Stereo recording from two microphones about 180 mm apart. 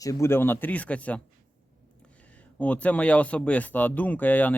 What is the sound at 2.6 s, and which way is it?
Speech, 10° left (ahead or behind).